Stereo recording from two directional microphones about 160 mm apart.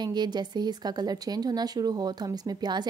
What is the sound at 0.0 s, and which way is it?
Speech, 25° right (ahead or behind).